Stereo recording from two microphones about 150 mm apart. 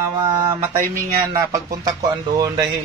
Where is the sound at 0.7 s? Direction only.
70° right (ahead or behind).